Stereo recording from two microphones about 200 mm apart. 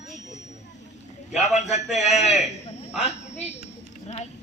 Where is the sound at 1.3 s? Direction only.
35° left (ahead or behind).